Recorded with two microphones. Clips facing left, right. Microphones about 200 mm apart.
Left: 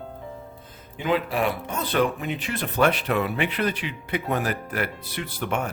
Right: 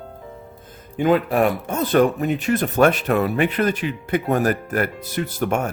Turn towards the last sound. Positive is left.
turn(degrees=-45)  # may be behind; listen again after turning